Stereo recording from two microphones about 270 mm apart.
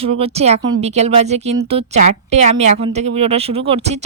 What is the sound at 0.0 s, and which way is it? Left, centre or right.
A woman's voice, right.